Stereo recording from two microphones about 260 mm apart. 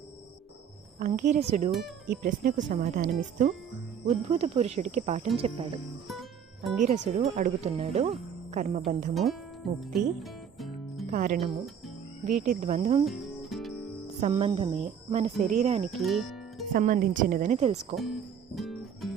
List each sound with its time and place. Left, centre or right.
0.9 s speech: right
1.7 s speech: centre
2.2 s speech: right
6.8 s speech: right
9.6 s speech: centre
11.0 s speech: right
13.1 s music: centre
14.2 s speech: right
15.9 s music: centre
16.7 s speech: right
17.9 s music: centre